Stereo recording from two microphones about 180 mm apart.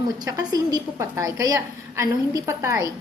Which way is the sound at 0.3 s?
20° right (ahead or behind).